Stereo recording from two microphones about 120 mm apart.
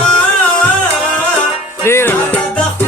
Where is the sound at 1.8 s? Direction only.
20° left (ahead or behind).